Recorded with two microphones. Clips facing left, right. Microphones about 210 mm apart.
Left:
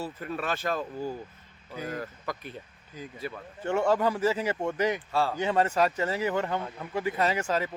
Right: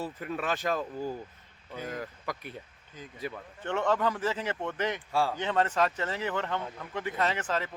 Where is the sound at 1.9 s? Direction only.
10° right (ahead or behind).